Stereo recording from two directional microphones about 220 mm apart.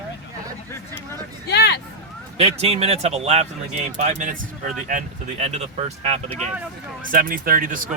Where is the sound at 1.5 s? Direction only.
50° left (ahead or behind).